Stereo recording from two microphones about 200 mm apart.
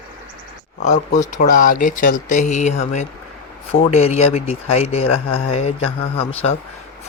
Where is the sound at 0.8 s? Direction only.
35° left (ahead or behind).